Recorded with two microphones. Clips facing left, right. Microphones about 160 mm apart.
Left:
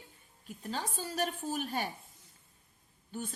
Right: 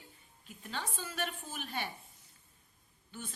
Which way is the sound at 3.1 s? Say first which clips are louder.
Left 6 dB; 40° left (ahead or behind).